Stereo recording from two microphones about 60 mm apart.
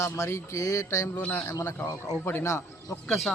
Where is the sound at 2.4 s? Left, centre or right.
Left.